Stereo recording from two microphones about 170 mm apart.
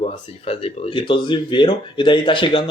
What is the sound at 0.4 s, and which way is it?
A man's voice, 30° left (ahead or behind).